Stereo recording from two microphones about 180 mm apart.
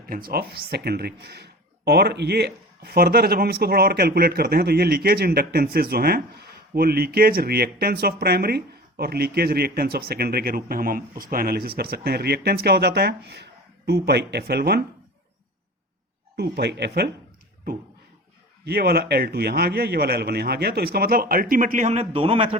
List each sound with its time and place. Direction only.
0.0 s speech: 55° right (ahead or behind)
16.4 s speech: 65° right (ahead or behind)
18.6 s speech: 60° right (ahead or behind); by 22.5 s 30° right (ahead or behind)